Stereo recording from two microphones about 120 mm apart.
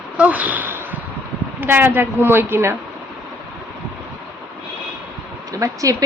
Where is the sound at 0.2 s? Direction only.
10° right (ahead or behind).